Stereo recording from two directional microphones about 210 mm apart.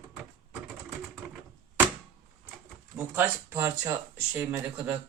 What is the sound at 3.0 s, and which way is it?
Speech, 10° right (ahead or behind).